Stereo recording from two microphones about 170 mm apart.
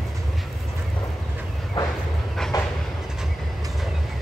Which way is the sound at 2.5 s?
20° left (ahead or behind).